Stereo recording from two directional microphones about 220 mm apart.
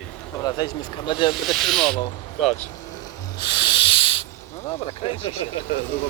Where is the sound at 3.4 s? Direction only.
20° left (ahead or behind).